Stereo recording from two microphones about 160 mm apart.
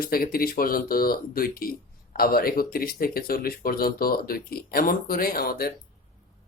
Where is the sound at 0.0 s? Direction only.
65° left (ahead or behind).